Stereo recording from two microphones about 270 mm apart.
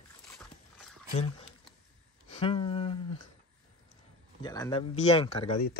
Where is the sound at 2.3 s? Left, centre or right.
Left.